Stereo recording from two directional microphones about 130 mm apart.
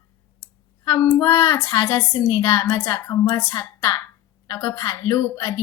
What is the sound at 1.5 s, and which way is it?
A woman's voice, 25° left (ahead or behind).